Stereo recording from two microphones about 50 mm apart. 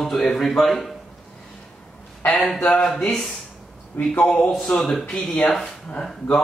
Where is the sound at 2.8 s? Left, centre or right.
Centre.